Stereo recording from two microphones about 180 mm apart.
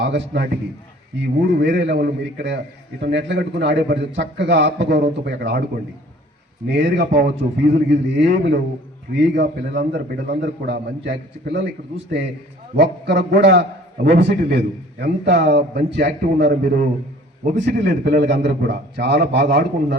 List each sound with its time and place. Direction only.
0.0 s a man's voice: 75° right (ahead or behind)
6.7 s a man's voice: 85° right
12.7 s a man's voice: 70° right (ahead or behind); by 16.9 s 50° right (ahead or behind)
17.4 s a man's voice: 65° right (ahead or behind)